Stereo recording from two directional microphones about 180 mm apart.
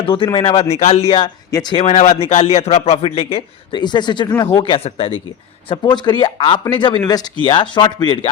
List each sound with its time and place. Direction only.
0.0 s a man's voice: 30° left (ahead or behind)
1.5 s speech: 20° left (ahead or behind)
1.8 s a man's voice: 40° left (ahead or behind); by 8.3 s 25° left (ahead or behind)